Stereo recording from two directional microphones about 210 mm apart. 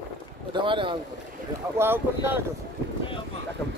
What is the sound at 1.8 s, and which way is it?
Speech, 10° right (ahead or behind).